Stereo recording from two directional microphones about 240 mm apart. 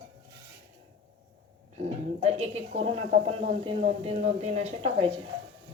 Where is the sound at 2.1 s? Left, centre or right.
Right.